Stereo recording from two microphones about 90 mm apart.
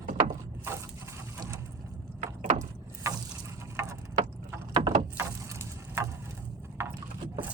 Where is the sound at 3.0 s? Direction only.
35° right (ahead or behind).